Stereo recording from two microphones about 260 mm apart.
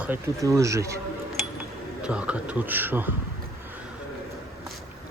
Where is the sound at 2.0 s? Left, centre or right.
Centre.